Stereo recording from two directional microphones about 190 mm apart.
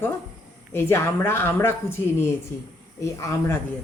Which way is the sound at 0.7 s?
15° left (ahead or behind).